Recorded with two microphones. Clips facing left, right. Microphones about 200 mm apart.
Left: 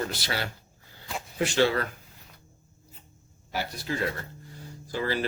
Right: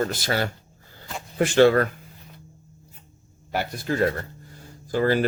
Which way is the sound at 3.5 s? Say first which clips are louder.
Right 5 dB; 55° right (ahead or behind).